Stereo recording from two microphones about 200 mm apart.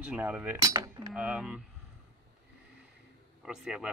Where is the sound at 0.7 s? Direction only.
20° right (ahead or behind).